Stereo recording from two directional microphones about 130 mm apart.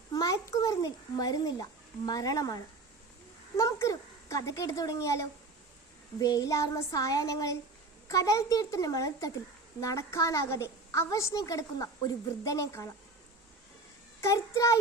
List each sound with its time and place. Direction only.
0.1 s a sound: 30° left (ahead or behind)
2.0 s a woman's voice: 30° left (ahead or behind)
3.6 s a woman's voice: 25° left (ahead or behind)
14.2 s a woman's voice: 25° left (ahead or behind)